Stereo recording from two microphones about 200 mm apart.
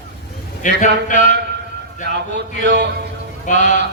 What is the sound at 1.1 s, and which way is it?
Speech, 60° right (ahead or behind).